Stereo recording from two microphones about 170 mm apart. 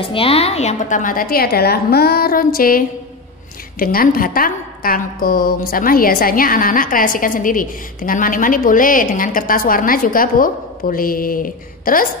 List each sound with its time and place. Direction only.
0.0 s a woman's voice: 30° left (ahead or behind); by 2.8 s 60° left (ahead or behind)
3.8 s a woman's voice: 60° left (ahead or behind)